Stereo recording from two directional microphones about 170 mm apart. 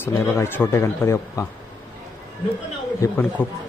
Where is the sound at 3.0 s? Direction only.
10° left (ahead or behind).